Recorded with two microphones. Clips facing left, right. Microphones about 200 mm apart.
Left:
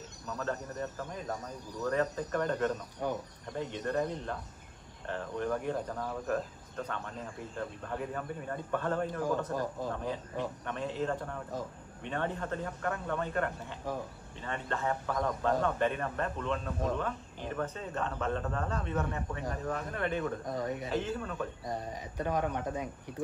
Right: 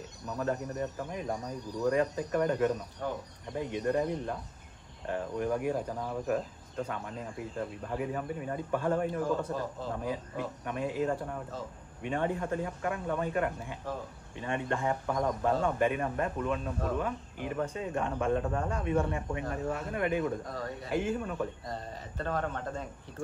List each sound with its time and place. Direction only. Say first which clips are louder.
0.4 s speech: right 4 dB; 15° right (ahead or behind)
3.0 s speech: left 2 dB; 15° left (ahead or behind)
3.5 s speech: right 3 dB; 10° right (ahead or behind)
20.5 s speech: left 4 dB; 20° left (ahead or behind)
20.9 s speech: right 2 dB; 10° right (ahead or behind)
21.6 s speech: left 2 dB; 15° left (ahead or behind)